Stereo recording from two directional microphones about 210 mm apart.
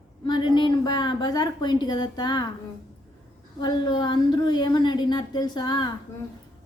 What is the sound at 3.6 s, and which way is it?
A woman's voice, 20° left (ahead or behind).